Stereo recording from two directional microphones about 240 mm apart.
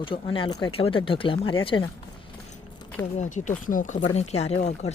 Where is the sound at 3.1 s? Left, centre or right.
Left.